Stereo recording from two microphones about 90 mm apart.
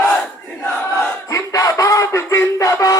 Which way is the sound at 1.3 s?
40° left (ahead or behind).